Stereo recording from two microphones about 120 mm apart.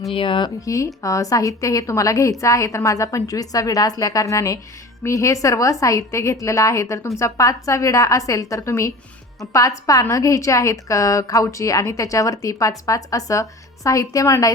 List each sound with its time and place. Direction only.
0.1 s speech: 45° left (ahead or behind)
0.6 s a woman's voice: 25° left (ahead or behind)